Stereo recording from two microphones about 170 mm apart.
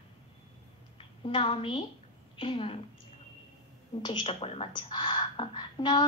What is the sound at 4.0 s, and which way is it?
A woman's voice, 30° left (ahead or behind).